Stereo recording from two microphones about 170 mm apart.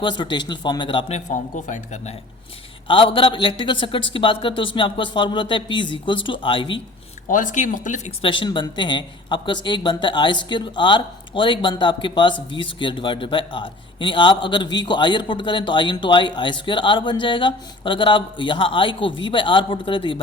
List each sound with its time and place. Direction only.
0.0 s speech: 25° left (ahead or behind)
1.3 s speech: 45° left (ahead or behind)
2.8 s speech: 30° left (ahead or behind)
7.3 s speech: 50° left (ahead or behind)
8.2 s speech: 30° left (ahead or behind)